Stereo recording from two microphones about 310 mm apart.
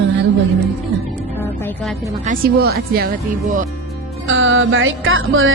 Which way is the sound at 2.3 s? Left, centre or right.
Right.